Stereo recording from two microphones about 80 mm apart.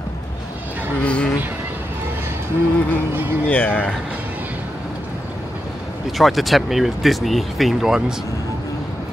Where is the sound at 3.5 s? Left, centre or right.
Centre.